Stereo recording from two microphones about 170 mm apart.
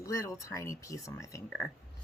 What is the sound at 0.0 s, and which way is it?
Speech, 20° left (ahead or behind).